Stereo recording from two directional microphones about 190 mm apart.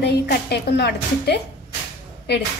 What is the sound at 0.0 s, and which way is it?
A woman's voice, 60° left (ahead or behind).